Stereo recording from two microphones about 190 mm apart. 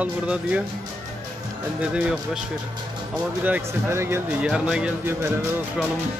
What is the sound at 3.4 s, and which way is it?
Speech, 10° right (ahead or behind).